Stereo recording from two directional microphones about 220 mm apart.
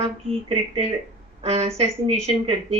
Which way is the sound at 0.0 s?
25° right (ahead or behind).